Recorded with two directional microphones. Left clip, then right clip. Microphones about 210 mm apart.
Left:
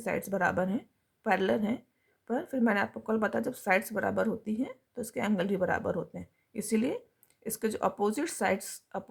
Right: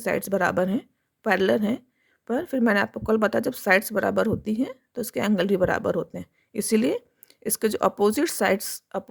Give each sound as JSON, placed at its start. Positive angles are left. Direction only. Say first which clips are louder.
{"t": 0.0, "sound": "speech", "louder": "right 6 dB", "side_deg": -45}